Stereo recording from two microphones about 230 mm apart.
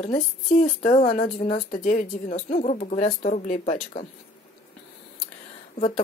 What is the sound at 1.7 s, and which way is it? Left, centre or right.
Speech, left.